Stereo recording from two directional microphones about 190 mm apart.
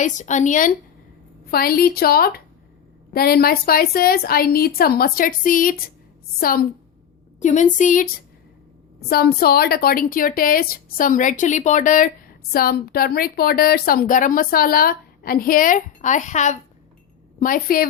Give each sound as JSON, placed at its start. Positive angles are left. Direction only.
{"t": 0.0, "sound": "a woman's voice", "side_deg": 40}
{"t": 1.5, "sound": "a woman's voice", "side_deg": 50}
{"t": 7.3, "sound": "a woman's voice", "side_deg": 40}